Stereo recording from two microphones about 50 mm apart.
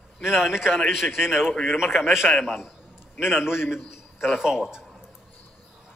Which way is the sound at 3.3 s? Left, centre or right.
Left.